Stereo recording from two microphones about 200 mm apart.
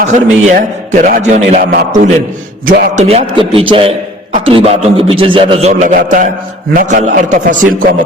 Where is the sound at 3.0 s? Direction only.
30° right (ahead or behind).